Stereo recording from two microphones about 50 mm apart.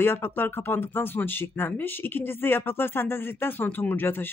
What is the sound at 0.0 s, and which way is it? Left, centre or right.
Speech, left.